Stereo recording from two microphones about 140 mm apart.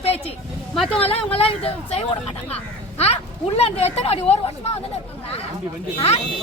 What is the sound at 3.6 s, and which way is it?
Speech, 50° left (ahead or behind).